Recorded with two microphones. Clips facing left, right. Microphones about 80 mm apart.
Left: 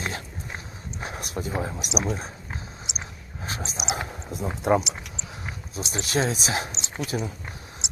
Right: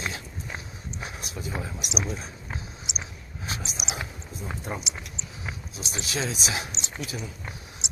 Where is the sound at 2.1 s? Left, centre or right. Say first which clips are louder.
Left 5 dB; left.